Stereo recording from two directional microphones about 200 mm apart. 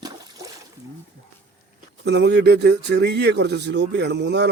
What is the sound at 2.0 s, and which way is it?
Speech, 60° right (ahead or behind).